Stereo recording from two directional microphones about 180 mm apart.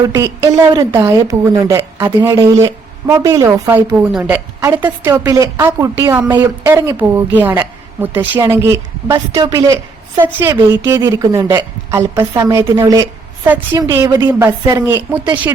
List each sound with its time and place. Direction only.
0.7 s a woman's voice: 25° right (ahead or behind)
15.2 s speech: 25° right (ahead or behind)